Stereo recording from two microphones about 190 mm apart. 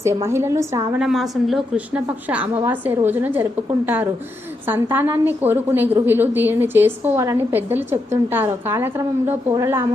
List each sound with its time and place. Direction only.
0.0 s a woman's voice: 15° right (ahead or behind)
0.9 s a woman's voice: centre (ahead or behind)